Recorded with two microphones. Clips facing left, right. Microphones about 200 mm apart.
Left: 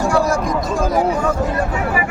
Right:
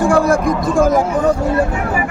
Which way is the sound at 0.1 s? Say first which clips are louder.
Right 4 dB; 55° right (ahead or behind).